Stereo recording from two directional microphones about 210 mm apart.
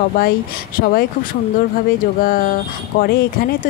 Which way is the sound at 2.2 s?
40° left (ahead or behind).